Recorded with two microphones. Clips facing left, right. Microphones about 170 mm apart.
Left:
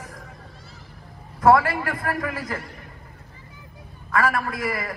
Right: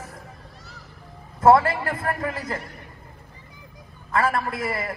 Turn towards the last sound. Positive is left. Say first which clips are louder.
# even
turn(degrees=-25)  # may be behind; listen again after turning